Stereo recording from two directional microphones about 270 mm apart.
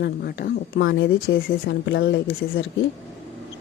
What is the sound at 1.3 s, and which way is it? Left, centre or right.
Speech, left.